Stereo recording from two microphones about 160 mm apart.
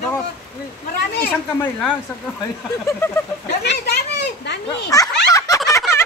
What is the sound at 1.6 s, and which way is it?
Speech, 5° left (ahead or behind).